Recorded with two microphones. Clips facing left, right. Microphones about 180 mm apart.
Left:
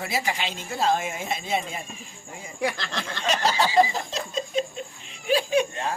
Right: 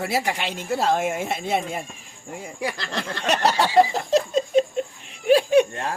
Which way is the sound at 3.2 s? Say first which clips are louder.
Right 3 dB; 65° right (ahead or behind).